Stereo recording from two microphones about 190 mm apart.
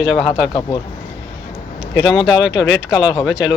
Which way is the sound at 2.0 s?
20° left (ahead or behind).